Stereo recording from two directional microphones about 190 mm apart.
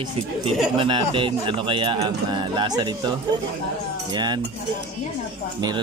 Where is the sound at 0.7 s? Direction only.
25° right (ahead or behind).